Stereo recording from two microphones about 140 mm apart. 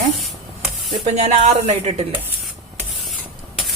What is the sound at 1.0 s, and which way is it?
Speech, 55° right (ahead or behind).